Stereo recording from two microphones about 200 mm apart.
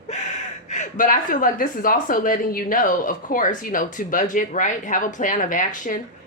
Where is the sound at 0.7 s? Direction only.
40° left (ahead or behind).